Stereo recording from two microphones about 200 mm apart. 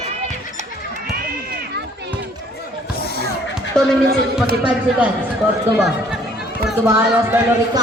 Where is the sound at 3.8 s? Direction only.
5° left (ahead or behind).